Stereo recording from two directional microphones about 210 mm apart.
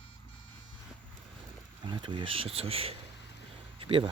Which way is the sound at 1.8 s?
20° right (ahead or behind).